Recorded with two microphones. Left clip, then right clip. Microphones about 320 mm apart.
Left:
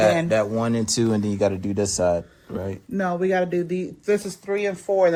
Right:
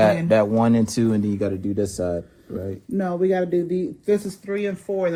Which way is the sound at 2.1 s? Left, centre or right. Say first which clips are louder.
Left 4 dB; left.